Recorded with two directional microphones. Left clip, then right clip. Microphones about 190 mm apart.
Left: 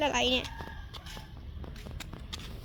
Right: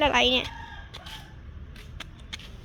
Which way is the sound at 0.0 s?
5° right (ahead or behind).